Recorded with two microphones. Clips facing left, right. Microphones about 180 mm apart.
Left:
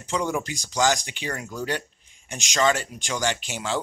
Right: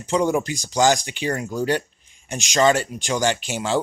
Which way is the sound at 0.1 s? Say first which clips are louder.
Right 6 dB; 30° right (ahead or behind).